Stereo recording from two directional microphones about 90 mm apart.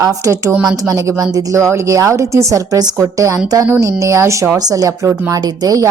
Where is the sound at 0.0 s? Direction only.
35° right (ahead or behind).